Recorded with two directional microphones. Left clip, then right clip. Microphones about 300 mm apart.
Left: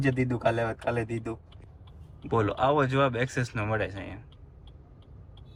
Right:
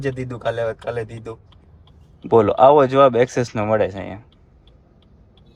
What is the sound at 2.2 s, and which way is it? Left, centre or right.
A man's voice, centre.